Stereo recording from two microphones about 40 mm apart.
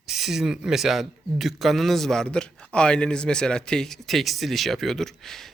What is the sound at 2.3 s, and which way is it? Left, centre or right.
Speech, left.